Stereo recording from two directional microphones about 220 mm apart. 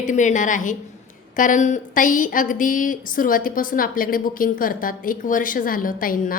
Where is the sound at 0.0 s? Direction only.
35° left (ahead or behind).